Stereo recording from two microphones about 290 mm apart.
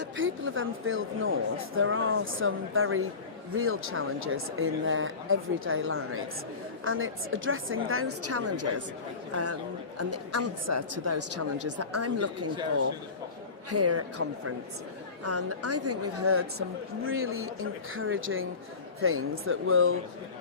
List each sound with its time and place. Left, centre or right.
0.0 s speech: right
13.7 s speech: right